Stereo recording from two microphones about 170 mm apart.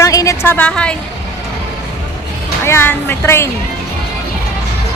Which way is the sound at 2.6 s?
15° left (ahead or behind).